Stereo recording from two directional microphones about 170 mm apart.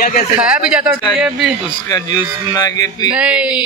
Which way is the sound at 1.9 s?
20° left (ahead or behind).